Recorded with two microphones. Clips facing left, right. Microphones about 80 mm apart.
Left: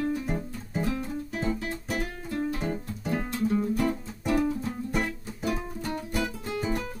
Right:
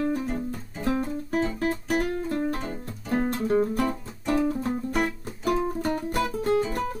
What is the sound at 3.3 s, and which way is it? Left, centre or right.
Music, right.